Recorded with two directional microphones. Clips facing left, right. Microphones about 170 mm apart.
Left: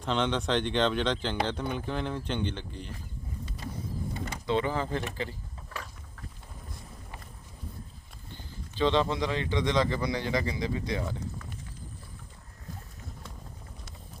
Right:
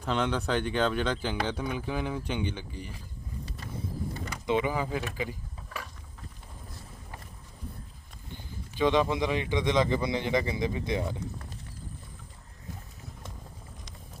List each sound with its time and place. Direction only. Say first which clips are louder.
0.0 s speech: even; 5° right (ahead or behind)
4.4 s speech: right 1 dB; 15° right (ahead or behind)
5.1 s keys jangling: right 1 dB; 10° right (ahead or behind)
8.3 s speech: right 2 dB; 15° right (ahead or behind)